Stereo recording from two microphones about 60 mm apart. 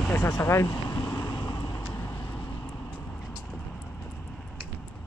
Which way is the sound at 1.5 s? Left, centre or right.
Left.